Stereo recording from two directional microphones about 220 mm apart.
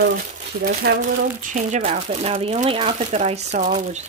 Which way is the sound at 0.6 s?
45° right (ahead or behind).